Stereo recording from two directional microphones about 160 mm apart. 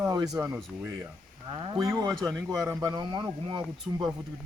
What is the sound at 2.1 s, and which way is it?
Speech, centre (ahead or behind).